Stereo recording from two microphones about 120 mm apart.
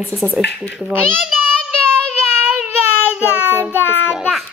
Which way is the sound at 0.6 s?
Centre (ahead or behind).